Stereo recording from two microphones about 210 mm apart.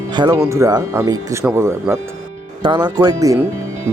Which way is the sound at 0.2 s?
15° right (ahead or behind).